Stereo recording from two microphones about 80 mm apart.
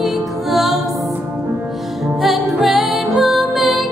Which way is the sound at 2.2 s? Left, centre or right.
Centre.